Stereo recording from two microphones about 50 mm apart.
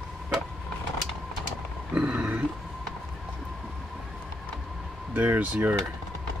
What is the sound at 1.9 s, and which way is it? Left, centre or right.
Grunt, right.